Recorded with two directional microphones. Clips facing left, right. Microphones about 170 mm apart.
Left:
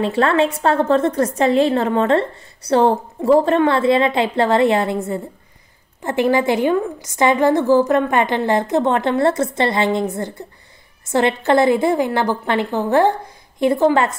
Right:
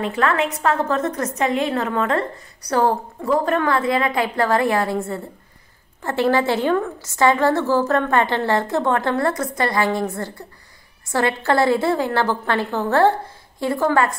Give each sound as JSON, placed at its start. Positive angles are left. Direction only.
{"t": 0.0, "sound": "a woman's voice", "side_deg": 30}